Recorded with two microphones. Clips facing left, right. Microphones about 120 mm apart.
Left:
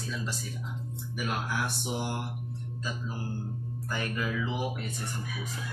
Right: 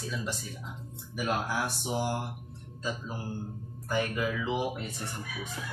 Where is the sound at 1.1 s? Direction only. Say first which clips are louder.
Right 3 dB; 25° right (ahead or behind).